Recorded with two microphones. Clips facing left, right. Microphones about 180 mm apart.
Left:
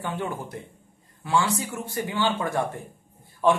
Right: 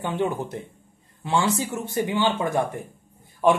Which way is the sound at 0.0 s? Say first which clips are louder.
Right 5 dB; 20° right (ahead or behind).